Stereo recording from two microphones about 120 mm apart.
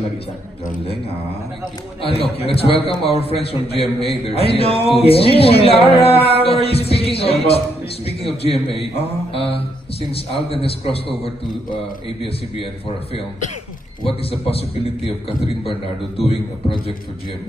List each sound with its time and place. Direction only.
2.0 s a man's voice: 55° left (ahead or behind)
15.0 s a man's voice: 50° left (ahead or behind)